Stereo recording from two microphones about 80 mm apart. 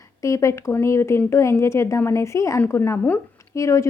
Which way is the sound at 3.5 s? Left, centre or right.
Left.